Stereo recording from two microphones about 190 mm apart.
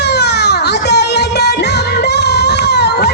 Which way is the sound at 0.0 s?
60° left (ahead or behind).